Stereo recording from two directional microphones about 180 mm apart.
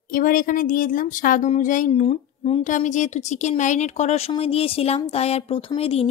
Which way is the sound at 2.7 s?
45° left (ahead or behind).